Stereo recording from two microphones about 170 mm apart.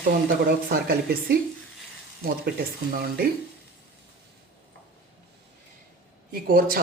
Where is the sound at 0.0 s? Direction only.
60° right (ahead or behind).